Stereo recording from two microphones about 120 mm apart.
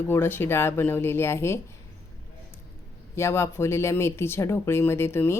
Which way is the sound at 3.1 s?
20° left (ahead or behind).